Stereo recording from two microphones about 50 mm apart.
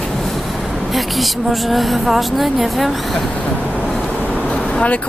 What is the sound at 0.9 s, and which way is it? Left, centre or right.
A woman's voice, centre.